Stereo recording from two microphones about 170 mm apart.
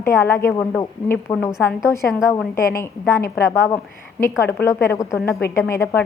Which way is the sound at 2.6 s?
15° left (ahead or behind).